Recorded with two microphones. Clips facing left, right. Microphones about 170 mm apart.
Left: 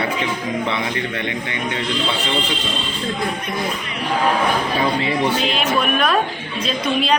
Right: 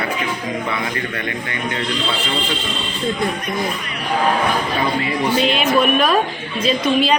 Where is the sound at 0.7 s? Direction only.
20° left (ahead or behind).